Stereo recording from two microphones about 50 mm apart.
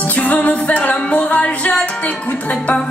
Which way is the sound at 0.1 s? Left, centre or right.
Left.